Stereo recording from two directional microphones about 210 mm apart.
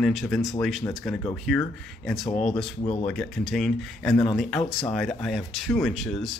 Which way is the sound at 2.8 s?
25° left (ahead or behind).